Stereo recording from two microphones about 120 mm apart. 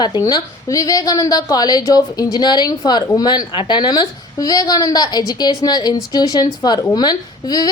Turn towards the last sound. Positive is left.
turn(degrees=35)  # may be behind; listen again after turning